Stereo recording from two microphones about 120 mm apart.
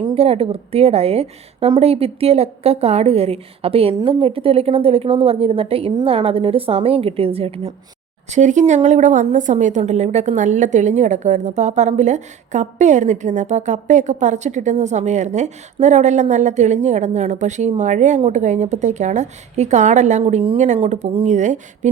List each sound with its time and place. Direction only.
0.1 s a woman's voice: 55° right (ahead or behind)
8.3 s a woman's voice: 90° right
20.7 s a woman's voice: 65° right (ahead or behind)
21.2 s a woman's voice: 80° right